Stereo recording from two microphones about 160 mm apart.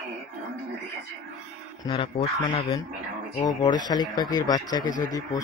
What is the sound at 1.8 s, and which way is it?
Speech, 30° left (ahead or behind).